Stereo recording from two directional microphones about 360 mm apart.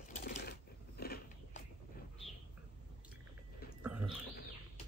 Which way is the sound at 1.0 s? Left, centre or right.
Left.